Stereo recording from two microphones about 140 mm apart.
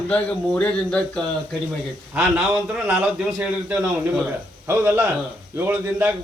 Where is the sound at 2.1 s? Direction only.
10° right (ahead or behind).